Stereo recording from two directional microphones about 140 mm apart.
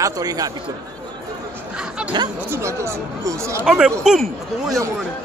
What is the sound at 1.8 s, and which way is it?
Music, 5° right (ahead or behind).